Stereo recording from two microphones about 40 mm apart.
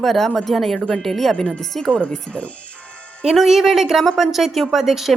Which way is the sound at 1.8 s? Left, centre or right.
Left.